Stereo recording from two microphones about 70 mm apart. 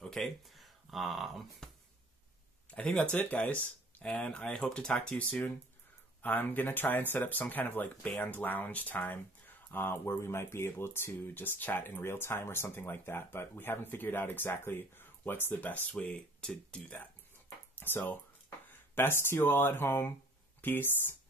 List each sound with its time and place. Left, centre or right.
0.0 s speech: centre
2.7 s speech: centre
4.9 s speech: left
16.3 s speech: centre
17.7 s speech: left